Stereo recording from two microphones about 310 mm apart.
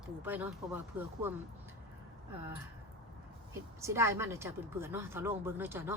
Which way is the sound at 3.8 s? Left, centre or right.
Centre.